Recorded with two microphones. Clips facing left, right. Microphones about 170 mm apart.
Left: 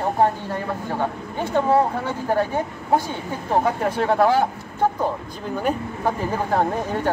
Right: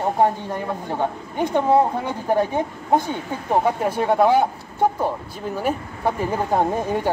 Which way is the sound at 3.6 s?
10° right (ahead or behind).